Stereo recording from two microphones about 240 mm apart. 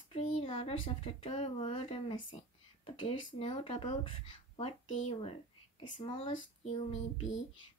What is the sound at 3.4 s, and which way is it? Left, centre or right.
Speech, left.